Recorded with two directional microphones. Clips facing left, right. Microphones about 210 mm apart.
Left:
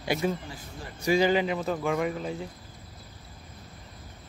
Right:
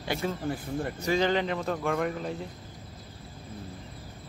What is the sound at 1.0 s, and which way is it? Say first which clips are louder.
Speech: left 4 dB; 10° left (ahead or behind).